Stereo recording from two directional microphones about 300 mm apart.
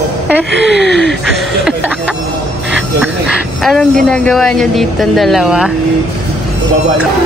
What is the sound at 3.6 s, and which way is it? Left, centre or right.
Speech, centre.